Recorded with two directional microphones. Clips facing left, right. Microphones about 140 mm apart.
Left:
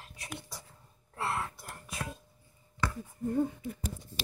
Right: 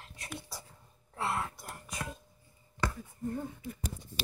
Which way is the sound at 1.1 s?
Centre (ahead or behind).